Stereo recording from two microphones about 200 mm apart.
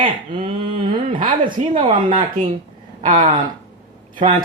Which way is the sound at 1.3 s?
45° right (ahead or behind).